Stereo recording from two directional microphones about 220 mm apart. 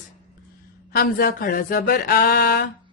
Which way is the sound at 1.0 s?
40° left (ahead or behind).